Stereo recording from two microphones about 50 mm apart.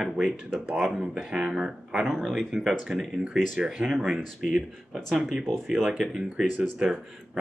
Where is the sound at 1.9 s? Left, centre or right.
Centre.